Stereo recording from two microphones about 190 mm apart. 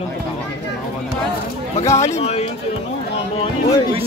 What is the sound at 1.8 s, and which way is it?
Speech, 15° left (ahead or behind).